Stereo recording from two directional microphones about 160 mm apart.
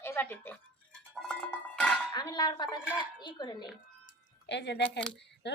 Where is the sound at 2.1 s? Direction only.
25° left (ahead or behind).